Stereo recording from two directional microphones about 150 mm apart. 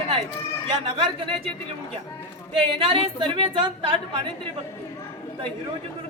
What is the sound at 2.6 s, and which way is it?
A man's voice, 40° right (ahead or behind).